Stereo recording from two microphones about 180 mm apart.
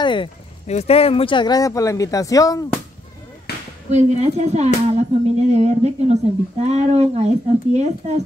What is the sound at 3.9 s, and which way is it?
Speech, 40° right (ahead or behind).